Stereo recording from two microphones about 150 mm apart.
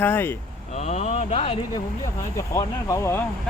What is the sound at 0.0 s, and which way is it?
Speech, 15° left (ahead or behind).